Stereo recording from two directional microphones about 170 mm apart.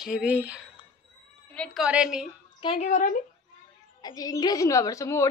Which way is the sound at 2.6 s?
35° left (ahead or behind).